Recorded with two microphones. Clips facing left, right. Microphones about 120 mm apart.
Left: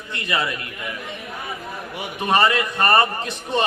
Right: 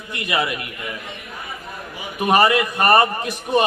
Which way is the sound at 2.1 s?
20° right (ahead or behind).